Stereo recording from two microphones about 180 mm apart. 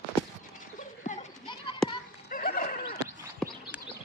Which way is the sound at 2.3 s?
50° left (ahead or behind).